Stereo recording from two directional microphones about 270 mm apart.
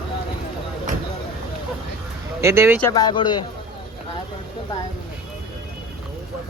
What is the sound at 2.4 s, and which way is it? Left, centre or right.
Speech, centre.